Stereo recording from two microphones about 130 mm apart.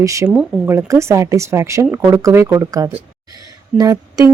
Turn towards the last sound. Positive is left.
turn(degrees=-25)  # may be behind; listen again after turning